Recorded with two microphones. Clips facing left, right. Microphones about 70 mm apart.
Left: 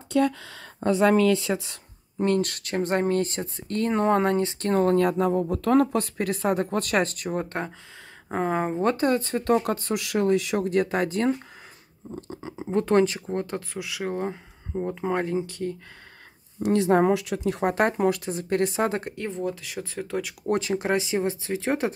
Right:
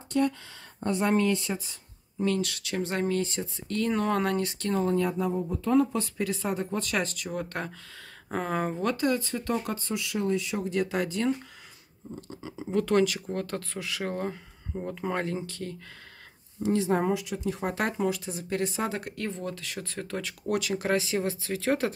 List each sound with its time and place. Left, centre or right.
0.1 s speech: left
1.5 s speech: left
4.8 s speech: left
7.2 s speech: left
8.8 s speech: left; by 15.7 s centre
16.6 s speech: left
17.5 s speech: left
19.1 s speech: centre
20.4 s speech: left